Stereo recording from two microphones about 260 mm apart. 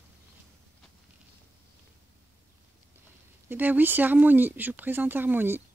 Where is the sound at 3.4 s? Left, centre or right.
Centre.